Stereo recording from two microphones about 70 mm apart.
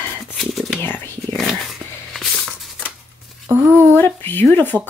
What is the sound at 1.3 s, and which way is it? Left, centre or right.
Dog, centre.